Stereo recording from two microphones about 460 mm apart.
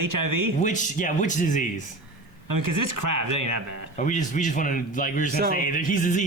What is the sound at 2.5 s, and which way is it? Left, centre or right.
Speech, right.